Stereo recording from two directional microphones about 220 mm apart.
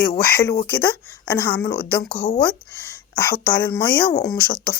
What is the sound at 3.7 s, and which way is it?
Speech, 10° left (ahead or behind).